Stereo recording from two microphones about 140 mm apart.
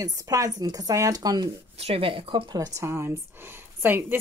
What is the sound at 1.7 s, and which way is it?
Speech, 45° right (ahead or behind).